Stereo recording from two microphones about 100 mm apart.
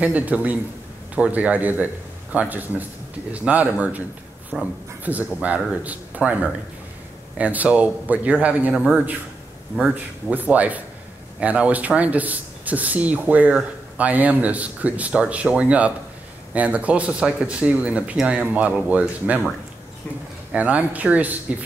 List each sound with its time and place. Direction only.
0.0 s speech: 15° right (ahead or behind)
4.5 s speech: centre (ahead or behind)
5.0 s speech: 15° right (ahead or behind)
20.5 s speech: 15° right (ahead or behind)